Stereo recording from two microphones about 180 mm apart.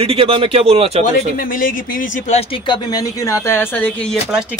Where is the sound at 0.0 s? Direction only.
30° right (ahead or behind).